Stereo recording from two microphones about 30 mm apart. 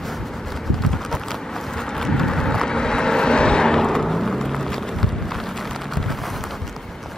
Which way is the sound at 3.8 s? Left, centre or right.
Centre.